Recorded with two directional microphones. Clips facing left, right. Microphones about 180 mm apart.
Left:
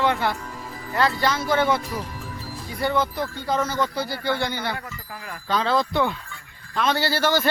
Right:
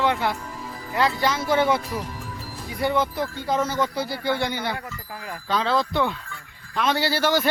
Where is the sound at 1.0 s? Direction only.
10° right (ahead or behind).